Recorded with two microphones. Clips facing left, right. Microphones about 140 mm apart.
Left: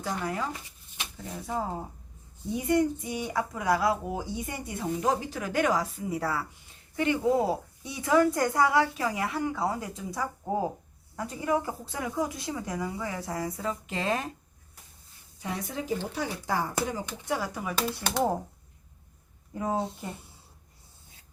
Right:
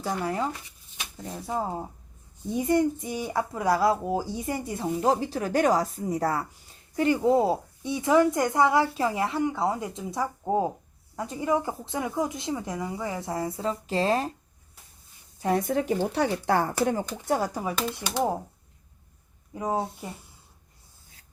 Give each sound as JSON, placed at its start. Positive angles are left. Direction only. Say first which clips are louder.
{"t": 1.5, "sound": "a woman's voice", "louder": "right 2 dB", "side_deg": -20}
{"t": 15.4, "sound": "speech", "louder": "right 10 dB", "side_deg": -50}
{"t": 18.0, "sound": "speech", "louder": "left 1 dB", "side_deg": 55}
{"t": 19.5, "sound": "speech", "louder": "right 1 dB", "side_deg": -10}